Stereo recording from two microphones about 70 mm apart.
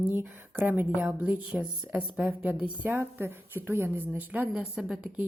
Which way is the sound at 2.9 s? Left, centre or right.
Right.